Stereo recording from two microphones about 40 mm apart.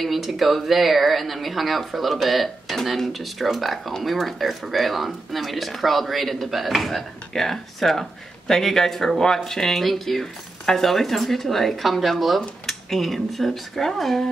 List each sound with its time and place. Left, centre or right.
0.0 s speech: centre
10.2 s speech: centre